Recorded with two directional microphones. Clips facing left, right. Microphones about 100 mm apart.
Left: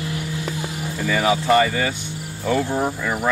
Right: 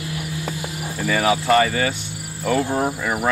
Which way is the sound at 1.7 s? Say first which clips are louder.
Right 1 dB; 15° right (ahead or behind).